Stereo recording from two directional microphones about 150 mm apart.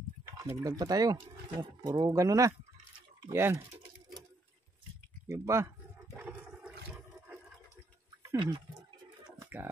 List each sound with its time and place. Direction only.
0.4 s speech: 20° right (ahead or behind)
5.3 s speech: 20° right (ahead or behind)
6.1 s toilet flush: 10° right (ahead or behind)
8.4 s speech: 30° right (ahead or behind)
9.4 s a sound: 15° right (ahead or behind)